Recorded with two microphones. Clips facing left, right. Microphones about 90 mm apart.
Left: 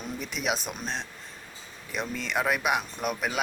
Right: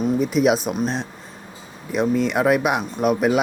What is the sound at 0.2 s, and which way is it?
Speech, centre (ahead or behind).